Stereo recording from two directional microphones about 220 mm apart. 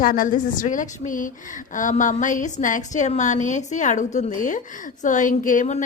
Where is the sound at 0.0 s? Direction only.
40° left (ahead or behind).